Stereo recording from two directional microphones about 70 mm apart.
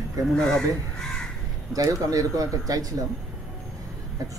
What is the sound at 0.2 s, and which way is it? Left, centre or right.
Speech, right.